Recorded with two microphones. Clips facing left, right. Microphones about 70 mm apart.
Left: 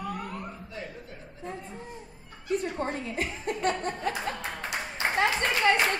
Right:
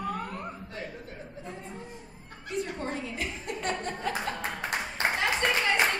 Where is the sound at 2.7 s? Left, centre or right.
Left.